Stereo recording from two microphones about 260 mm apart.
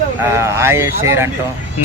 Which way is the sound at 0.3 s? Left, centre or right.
Centre.